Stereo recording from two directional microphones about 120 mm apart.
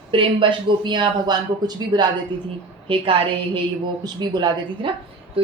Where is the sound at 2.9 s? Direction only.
50° right (ahead or behind).